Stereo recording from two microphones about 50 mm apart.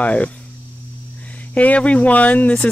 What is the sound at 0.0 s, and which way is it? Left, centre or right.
Speech, left.